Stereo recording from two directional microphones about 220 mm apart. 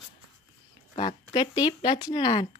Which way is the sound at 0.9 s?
20° left (ahead or behind).